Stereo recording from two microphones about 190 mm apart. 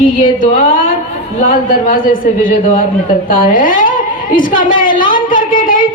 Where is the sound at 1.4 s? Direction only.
45° left (ahead or behind).